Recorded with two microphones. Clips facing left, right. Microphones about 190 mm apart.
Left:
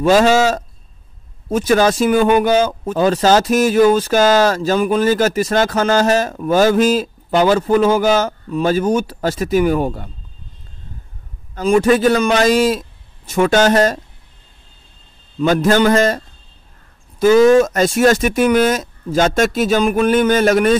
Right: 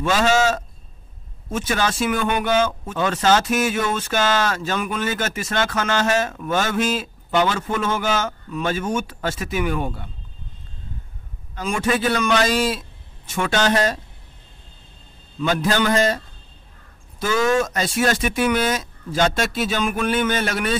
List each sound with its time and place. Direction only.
0.0 s speech: 40° left (ahead or behind)
11.5 s speech: 40° left (ahead or behind)
15.4 s speech: 45° left (ahead or behind)
17.2 s speech: 40° left (ahead or behind)